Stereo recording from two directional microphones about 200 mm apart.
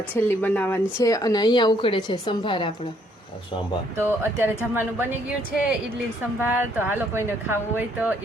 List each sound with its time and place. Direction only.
0.1 s speech: 10° left (ahead or behind)
3.9 s speech: 10° right (ahead or behind)
6.4 s speech: 10° right (ahead or behind)